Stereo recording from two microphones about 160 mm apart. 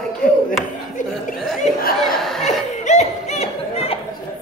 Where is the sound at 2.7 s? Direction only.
45° left (ahead or behind).